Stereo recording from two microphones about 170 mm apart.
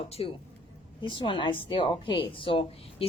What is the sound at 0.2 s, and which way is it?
A woman's voice, 30° left (ahead or behind).